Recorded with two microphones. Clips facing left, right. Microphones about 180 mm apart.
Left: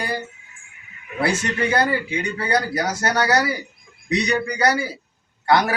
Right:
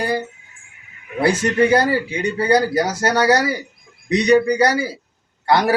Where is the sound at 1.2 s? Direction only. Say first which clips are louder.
Right 6 dB; 35° right (ahead or behind).